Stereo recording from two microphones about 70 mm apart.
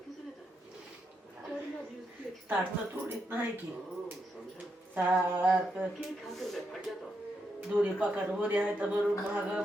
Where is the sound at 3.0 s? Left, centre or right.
Right.